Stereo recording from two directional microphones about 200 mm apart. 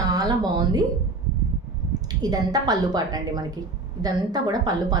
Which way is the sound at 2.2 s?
20° right (ahead or behind).